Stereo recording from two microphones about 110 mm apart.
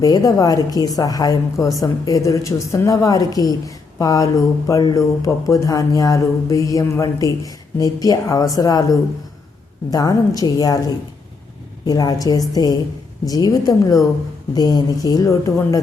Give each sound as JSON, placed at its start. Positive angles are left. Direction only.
{"t": 0.0, "sound": "speech", "side_deg": 30}